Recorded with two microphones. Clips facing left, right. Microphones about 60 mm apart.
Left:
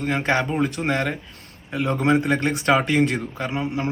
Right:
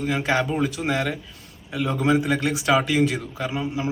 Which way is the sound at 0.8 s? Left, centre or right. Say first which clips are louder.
Left 1 dB; left.